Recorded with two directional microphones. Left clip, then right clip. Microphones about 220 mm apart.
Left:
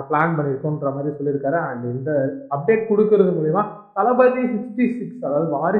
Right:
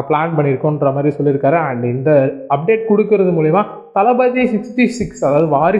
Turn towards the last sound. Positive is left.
turn(degrees=-40)  # may be behind; listen again after turning